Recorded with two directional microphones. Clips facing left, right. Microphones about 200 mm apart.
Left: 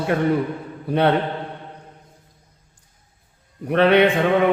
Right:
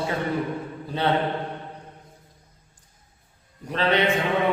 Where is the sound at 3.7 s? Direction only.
60° left (ahead or behind).